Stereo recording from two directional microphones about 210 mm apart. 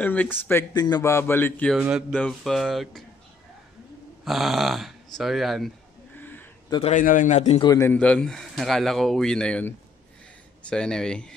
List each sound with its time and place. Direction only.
0.0 s a man's voice: 10° left (ahead or behind)
4.2 s a man's voice: centre (ahead or behind)
6.1 s a sound: 10° left (ahead or behind)
6.9 s a man's voice: 40° left (ahead or behind)
7.6 s a man's voice: 15° left (ahead or behind)